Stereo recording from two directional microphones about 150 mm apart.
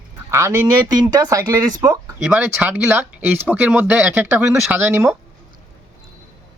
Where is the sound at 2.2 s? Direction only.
10° right (ahead or behind).